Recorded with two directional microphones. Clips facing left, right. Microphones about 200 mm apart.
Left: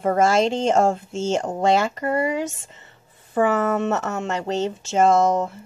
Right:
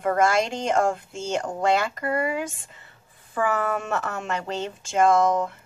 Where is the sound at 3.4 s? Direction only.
25° left (ahead or behind).